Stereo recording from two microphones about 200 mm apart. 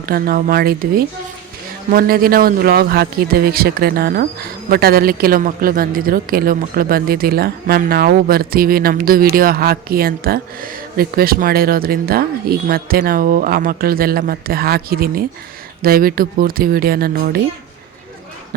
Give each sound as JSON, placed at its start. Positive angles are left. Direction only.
{"t": 0.0, "sound": "a man's voice", "side_deg": -50}